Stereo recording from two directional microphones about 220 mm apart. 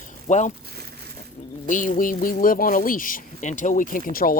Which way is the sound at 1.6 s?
35° left (ahead or behind).